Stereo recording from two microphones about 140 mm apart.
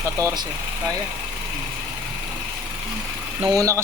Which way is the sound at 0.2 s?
20° right (ahead or behind).